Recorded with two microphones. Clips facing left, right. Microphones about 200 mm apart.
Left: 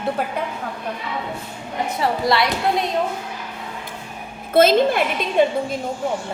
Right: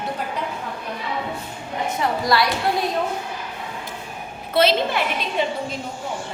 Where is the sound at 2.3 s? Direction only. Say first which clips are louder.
Left 1 dB; 25° left (ahead or behind).